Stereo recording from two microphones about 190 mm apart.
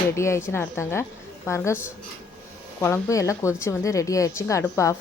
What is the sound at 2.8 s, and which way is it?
Speech, 15° left (ahead or behind).